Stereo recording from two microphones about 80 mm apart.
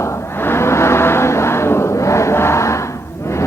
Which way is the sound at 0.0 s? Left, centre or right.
Left.